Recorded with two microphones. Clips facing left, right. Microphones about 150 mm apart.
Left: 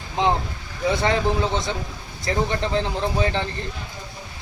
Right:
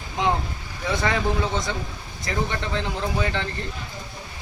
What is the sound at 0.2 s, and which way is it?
Speech, 30° left (ahead or behind).